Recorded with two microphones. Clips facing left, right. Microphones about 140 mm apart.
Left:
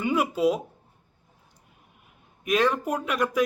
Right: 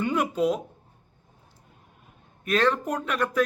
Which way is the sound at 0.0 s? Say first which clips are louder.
Left 1 dB; 10° left (ahead or behind).